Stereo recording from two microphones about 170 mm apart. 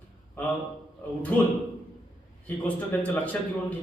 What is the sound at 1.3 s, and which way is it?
Speech, 10° left (ahead or behind).